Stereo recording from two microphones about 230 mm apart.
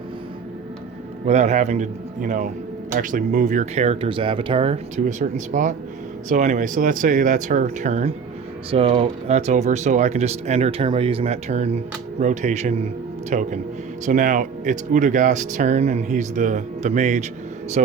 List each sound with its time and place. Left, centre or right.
1.2 s speech: right